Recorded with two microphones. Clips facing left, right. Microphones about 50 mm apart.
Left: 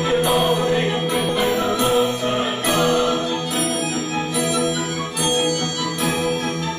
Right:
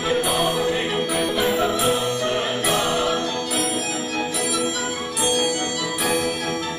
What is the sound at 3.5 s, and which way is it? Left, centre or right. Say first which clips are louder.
Music: left 2 dB; centre.